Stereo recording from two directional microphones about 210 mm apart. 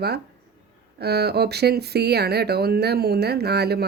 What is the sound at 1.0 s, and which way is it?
Speech, 50° right (ahead or behind).